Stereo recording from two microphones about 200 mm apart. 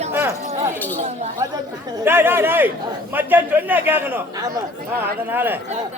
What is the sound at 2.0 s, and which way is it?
A man's voice, 10° right (ahead or behind).